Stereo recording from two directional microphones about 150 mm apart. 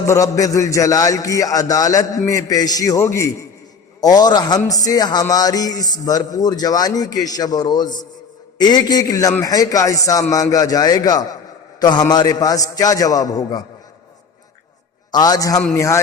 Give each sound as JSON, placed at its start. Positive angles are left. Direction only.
{"t": 0.1, "sound": "a man's voice", "side_deg": 20}
{"t": 15.1, "sound": "a man's voice", "side_deg": 25}